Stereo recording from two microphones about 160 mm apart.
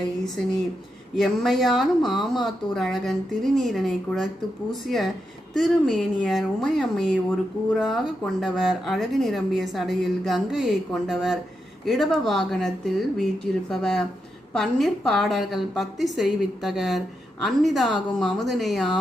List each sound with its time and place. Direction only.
1.1 s speech: centre (ahead or behind)